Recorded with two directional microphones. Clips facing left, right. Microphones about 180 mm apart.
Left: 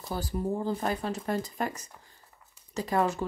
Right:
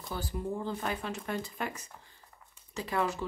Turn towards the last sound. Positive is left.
turn(degrees=45)  # may be behind; listen again after turning